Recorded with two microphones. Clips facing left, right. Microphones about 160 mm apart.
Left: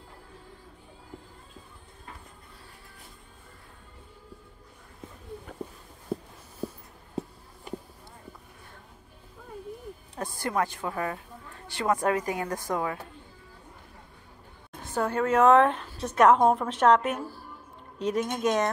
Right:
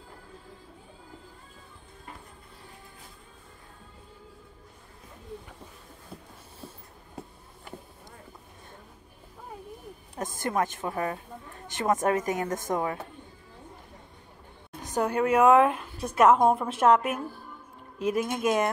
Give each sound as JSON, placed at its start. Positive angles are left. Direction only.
{"t": 6.1, "sound": "a sound", "side_deg": 50}
{"t": 10.1, "sound": "a woman's voice", "side_deg": -20}
{"t": 14.9, "sound": "a woman's voice", "side_deg": -15}